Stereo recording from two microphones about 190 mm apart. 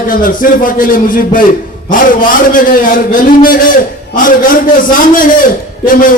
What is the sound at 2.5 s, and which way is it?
A man's voice, 45° left (ahead or behind).